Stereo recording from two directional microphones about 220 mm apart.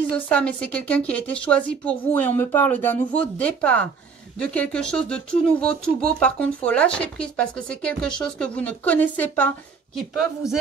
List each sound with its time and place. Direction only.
0.1 s a woman's voice: 5° left (ahead or behind)